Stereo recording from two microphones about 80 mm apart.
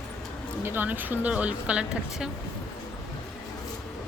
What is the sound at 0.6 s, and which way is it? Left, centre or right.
Speech, right.